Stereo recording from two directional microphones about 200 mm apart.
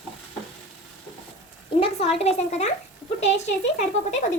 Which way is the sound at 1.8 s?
30° left (ahead or behind).